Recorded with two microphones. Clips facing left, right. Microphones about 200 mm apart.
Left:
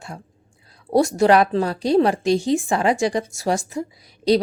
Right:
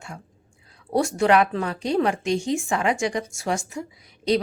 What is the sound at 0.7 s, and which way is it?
A woman's voice, 35° left (ahead or behind).